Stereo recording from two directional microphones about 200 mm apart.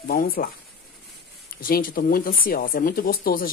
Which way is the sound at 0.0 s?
45° left (ahead or behind).